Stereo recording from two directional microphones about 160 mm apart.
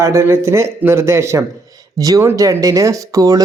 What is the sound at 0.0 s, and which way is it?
A man's voice, 15° right (ahead or behind).